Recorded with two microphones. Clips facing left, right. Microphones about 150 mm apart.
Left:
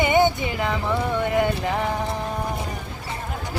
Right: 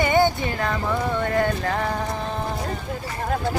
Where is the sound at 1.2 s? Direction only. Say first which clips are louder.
Left 1 dB; 15° left (ahead or behind).